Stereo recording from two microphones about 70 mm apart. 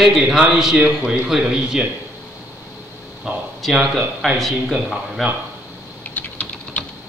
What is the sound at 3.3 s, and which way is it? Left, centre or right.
Speech, centre.